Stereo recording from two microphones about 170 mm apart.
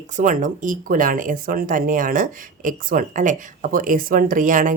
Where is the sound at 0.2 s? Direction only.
50° right (ahead or behind).